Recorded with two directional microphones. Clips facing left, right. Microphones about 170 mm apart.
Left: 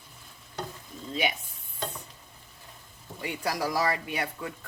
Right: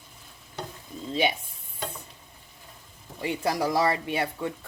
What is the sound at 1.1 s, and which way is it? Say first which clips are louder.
Speech: right 4 dB; 30° right (ahead or behind).